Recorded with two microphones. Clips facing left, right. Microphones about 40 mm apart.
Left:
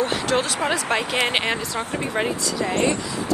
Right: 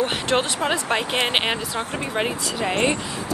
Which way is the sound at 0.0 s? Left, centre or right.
Right.